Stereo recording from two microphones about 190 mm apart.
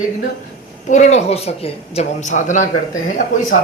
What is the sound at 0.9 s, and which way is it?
Speech, 40° left (ahead or behind).